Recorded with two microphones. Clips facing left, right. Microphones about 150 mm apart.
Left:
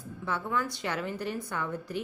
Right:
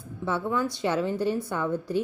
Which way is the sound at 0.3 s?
25° right (ahead or behind).